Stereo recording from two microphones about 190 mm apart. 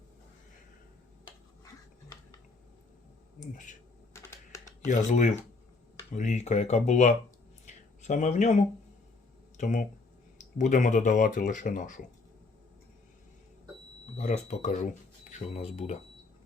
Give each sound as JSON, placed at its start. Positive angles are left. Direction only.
{"t": 4.1, "sound": "computer keyboard", "side_deg": 15}
{"t": 4.6, "sound": "speech", "side_deg": 40}
{"t": 7.6, "sound": "a sound", "side_deg": 40}
{"t": 9.6, "sound": "speech", "side_deg": 45}
{"t": 14.2, "sound": "speech", "side_deg": 35}